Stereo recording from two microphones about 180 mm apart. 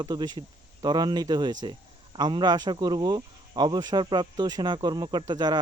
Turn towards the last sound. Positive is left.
turn(degrees=-25)  # may be behind; listen again after turning